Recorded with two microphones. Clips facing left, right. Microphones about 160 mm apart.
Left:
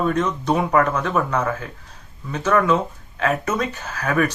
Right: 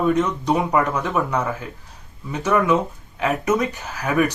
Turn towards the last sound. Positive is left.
turn(degrees=-15)  # may be behind; listen again after turning